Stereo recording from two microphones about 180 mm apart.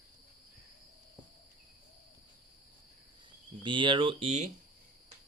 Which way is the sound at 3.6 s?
25° right (ahead or behind).